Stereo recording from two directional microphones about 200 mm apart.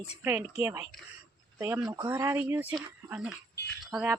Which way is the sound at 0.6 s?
10° right (ahead or behind).